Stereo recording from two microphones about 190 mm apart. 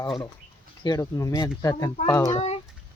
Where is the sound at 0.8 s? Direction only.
20° left (ahead or behind).